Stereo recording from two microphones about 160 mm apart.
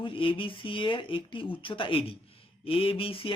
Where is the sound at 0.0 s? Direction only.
35° left (ahead or behind).